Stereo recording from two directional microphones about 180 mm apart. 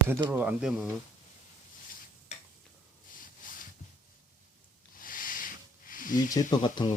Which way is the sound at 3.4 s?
50° left (ahead or behind).